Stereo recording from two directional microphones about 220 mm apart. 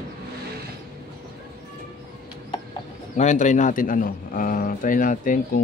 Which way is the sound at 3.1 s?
35° left (ahead or behind).